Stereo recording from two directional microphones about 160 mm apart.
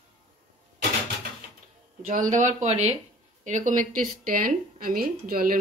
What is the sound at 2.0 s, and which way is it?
Speech, 50° right (ahead or behind).